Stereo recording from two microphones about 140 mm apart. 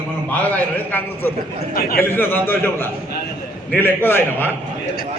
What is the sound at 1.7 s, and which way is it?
Speech, 90° left.